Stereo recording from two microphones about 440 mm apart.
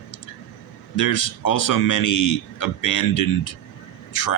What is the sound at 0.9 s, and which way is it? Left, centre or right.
Speech, left.